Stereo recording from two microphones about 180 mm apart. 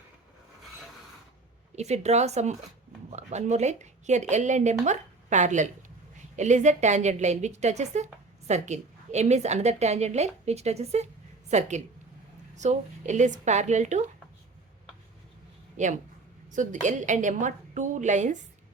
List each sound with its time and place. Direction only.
1.7 s a woman's voice: 40° right (ahead or behind)
15.8 s a woman's voice: 45° right (ahead or behind)